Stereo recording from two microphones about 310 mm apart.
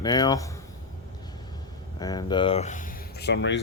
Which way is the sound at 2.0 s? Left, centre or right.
Centre.